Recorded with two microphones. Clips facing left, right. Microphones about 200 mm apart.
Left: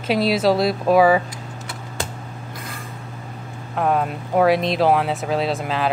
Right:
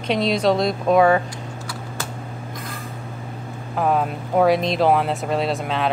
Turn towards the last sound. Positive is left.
turn(degrees=0)  # may be behind; listen again after turning